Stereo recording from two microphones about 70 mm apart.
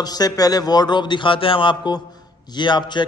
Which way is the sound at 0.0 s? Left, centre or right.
Left.